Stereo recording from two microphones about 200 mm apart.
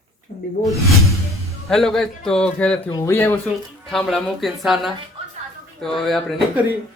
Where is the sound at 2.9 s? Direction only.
15° left (ahead or behind).